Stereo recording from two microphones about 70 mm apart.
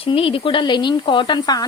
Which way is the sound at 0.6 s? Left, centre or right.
Left.